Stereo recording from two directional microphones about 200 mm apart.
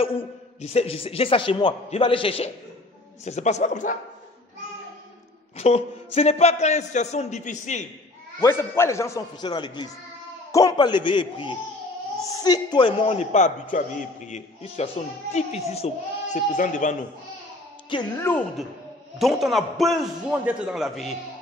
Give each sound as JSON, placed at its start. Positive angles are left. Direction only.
{"t": 0.0, "sound": "a man's voice", "side_deg": 30}
{"t": 5.6, "sound": "a man's voice", "side_deg": 35}
{"t": 8.4, "sound": "a man's voice", "side_deg": 15}
{"t": 17.9, "sound": "a man's voice", "side_deg": 25}
{"t": 19.1, "sound": "a man's voice", "side_deg": 0}